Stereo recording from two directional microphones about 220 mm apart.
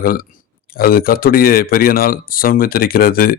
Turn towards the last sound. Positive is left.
turn(degrees=40)  # may be behind; listen again after turning